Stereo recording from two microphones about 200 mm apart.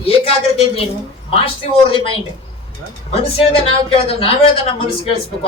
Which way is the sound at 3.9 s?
30° left (ahead or behind).